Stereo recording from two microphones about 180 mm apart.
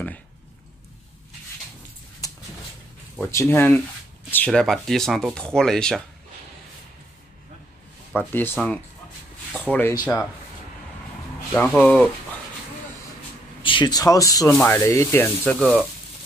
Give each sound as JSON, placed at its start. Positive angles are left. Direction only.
{"t": 3.2, "sound": "rub", "side_deg": 15}
{"t": 4.3, "sound": "speech", "side_deg": 5}
{"t": 8.1, "sound": "rub", "side_deg": 10}
{"t": 9.5, "sound": "speech", "side_deg": 10}
{"t": 11.5, "sound": "rub", "side_deg": 5}
{"t": 13.6, "sound": "speech", "side_deg": 25}
{"t": 14.5, "sound": "rub", "side_deg": 10}